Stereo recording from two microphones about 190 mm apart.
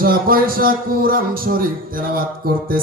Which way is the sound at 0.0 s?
50° right (ahead or behind).